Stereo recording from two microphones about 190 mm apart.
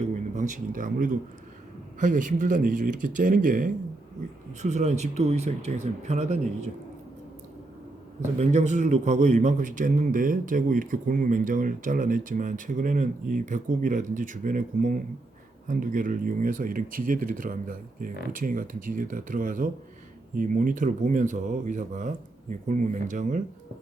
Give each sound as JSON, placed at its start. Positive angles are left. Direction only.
{"t": 0.0, "sound": "a sound", "side_deg": -40}
{"t": 2.0, "sound": "a man's voice", "side_deg": -45}
{"t": 8.4, "sound": "a man's voice", "side_deg": -40}